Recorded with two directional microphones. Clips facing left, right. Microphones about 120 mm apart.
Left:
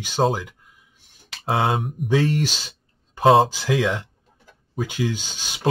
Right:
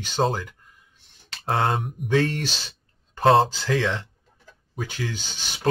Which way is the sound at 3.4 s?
10° left (ahead or behind).